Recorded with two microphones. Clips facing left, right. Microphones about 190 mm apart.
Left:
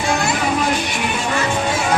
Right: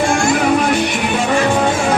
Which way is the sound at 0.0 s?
50° right (ahead or behind).